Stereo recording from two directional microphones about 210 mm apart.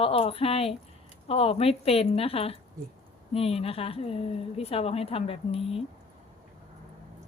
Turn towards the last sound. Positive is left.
turn(degrees=30)  # may be behind; listen again after turning